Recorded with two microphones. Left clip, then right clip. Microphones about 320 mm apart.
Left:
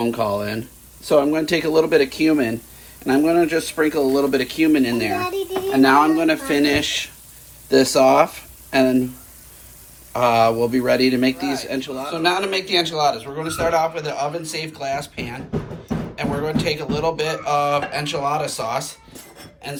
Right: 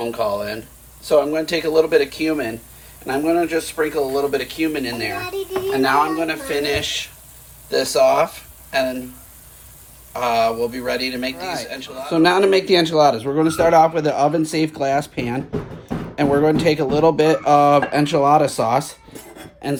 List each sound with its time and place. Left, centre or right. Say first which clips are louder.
0.0 s speech: even; left
10.2 s speech: left 2 dB; centre
12.0 s speech: right 6 dB; right